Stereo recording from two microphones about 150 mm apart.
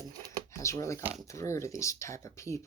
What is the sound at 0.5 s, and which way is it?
Speech, 20° left (ahead or behind).